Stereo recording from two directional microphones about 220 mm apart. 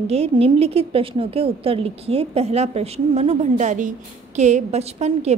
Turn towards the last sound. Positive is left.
turn(degrees=-30)  # may be behind; listen again after turning